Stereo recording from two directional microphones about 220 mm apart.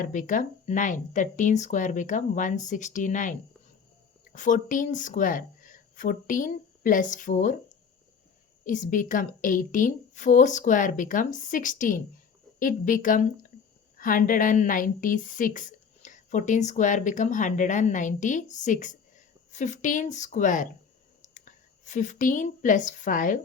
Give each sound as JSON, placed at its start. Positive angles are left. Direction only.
{"t": 0.0, "sound": "a woman's voice", "side_deg": 35}
{"t": 8.6, "sound": "a woman's voice", "side_deg": 35}